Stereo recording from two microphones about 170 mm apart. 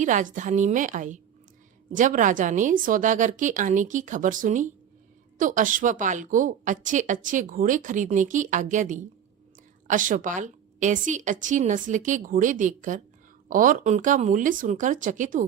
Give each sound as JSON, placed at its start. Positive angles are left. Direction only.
{"t": 0.0, "sound": "a woman's voice", "side_deg": -50}